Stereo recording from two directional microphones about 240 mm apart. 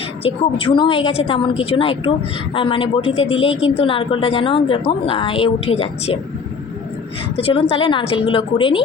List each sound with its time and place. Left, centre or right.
0.2 s speech: left
7.3 s speech: left